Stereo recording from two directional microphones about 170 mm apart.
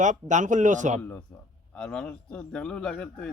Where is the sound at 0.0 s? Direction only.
45° right (ahead or behind).